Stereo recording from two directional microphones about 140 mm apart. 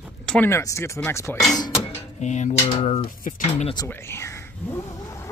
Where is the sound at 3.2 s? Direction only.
70° left (ahead or behind).